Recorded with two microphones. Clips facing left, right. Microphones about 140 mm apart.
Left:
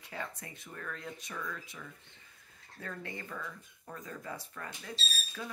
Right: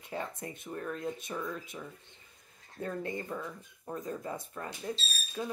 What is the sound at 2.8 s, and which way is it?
Speech, 25° right (ahead or behind).